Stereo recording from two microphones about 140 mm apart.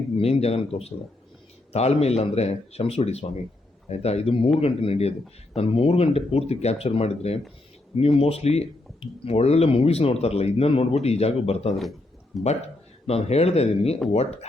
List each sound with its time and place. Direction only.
0.2 s speech: 45° left (ahead or behind)
11.8 s a sound: centre (ahead or behind)
12.4 s speech: 50° left (ahead or behind)